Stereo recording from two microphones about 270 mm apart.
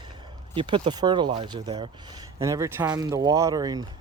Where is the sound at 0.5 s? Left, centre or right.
Centre.